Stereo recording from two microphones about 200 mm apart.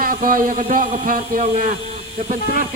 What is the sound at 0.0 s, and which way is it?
Speech, 45° right (ahead or behind).